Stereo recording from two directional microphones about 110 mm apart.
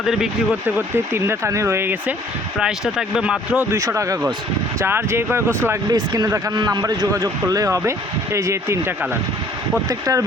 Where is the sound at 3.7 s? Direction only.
30° right (ahead or behind).